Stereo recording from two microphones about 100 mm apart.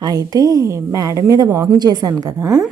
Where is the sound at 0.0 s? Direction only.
40° right (ahead or behind).